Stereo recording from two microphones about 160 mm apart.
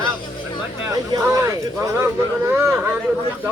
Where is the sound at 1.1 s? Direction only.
20° right (ahead or behind).